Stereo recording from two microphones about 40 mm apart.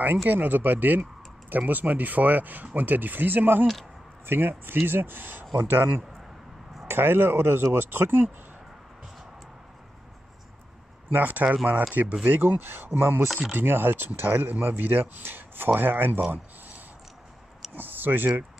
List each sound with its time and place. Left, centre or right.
0.0 s speech: right
6.9 s speech: right
11.1 s speech: right
11.4 s speech: right
12.3 s speech: right
16.3 s a sound: right
17.7 s speech: right